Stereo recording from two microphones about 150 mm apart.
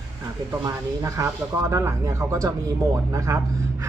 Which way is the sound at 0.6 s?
20° right (ahead or behind).